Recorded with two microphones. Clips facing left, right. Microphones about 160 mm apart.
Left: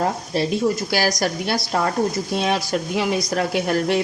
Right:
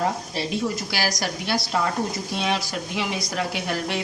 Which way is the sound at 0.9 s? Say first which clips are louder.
Left 6 dB; 45° left (ahead or behind).